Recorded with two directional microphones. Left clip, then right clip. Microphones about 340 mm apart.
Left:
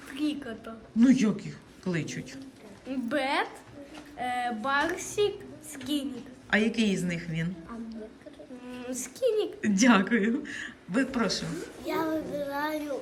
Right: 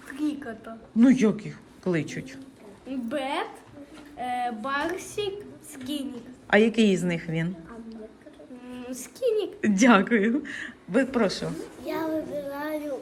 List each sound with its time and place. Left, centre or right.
0.2 s a woman's voice: centre